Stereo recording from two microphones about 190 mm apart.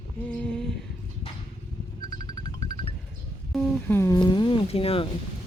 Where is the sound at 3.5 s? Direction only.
10° left (ahead or behind); by 5.1 s 30° left (ahead or behind).